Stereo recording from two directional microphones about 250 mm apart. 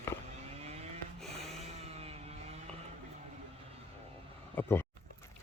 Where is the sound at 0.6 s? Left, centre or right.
Right.